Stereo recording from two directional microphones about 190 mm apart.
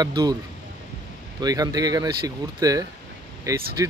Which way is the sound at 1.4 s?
20° right (ahead or behind).